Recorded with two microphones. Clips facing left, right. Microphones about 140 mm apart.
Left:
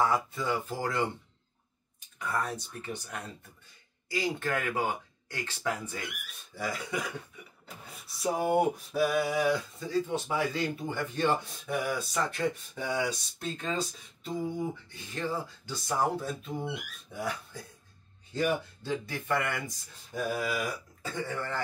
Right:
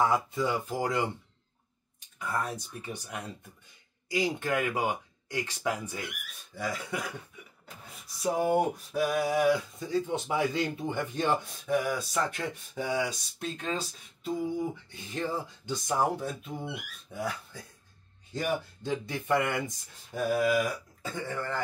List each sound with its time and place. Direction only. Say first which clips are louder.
0.0 s speech: right 2 dB; 20° right (ahead or behind)
2.1 s speech: even; 10° right (ahead or behind)
6.5 s speech: even; centre (ahead or behind)
8.2 s speech: right 1 dB; centre (ahead or behind)
9.8 s speech: even; 15° right (ahead or behind)
11.7 s speech: right 3 dB; centre (ahead or behind)
14.4 s speech: even; 20° right (ahead or behind)
16.6 s speech: left 2 dB; 5° left (ahead or behind)
18.3 s speech: left 2 dB; 15° right (ahead or behind)
20.3 s speech: right 6 dB; centre (ahead or behind)